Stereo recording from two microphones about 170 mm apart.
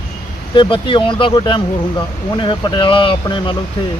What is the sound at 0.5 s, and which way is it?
Speech, 30° left (ahead or behind).